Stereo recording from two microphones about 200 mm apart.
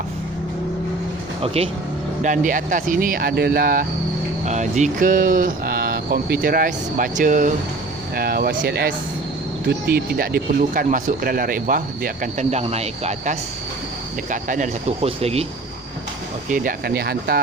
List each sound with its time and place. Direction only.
1.4 s speech: 30° right (ahead or behind)
2.2 s speech: 40° right (ahead or behind)
4.4 s speech: 35° right (ahead or behind)
16.5 s speech: 45° right (ahead or behind)